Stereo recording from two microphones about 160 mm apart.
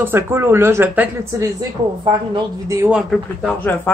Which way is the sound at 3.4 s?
10° left (ahead or behind).